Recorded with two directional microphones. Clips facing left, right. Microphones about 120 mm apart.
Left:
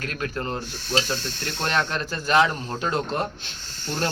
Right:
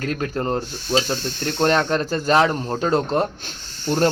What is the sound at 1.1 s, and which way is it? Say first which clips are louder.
Speech: right 5 dB; 50° right (ahead or behind).